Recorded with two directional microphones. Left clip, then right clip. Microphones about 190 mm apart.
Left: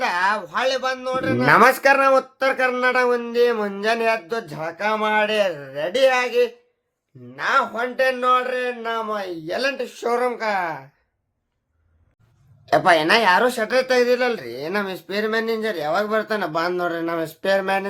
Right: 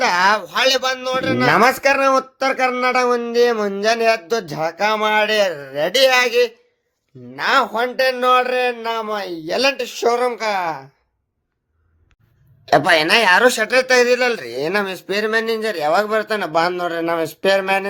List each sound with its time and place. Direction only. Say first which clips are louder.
0.0 s a man's voice: right 5 dB; 35° right (ahead or behind)
1.5 s speech: left 1 dB; 10° right (ahead or behind); by 5.9 s 35° right (ahead or behind)
5.9 s a man's voice: right 4 dB; 50° right (ahead or behind); by 10.8 s 35° right (ahead or behind)
12.9 s speech: right 1 dB; 35° right (ahead or behind)